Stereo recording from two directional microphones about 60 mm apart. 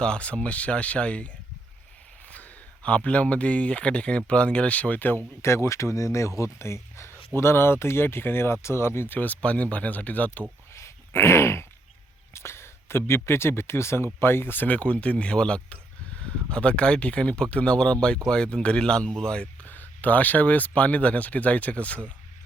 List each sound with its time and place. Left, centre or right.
0.0 s speech: centre
2.3 s speech: left
5.4 s speech: left
9.1 s speech: left
10.8 s dog: left
12.3 s speech: left; by 19.5 s centre
19.6 s speech: left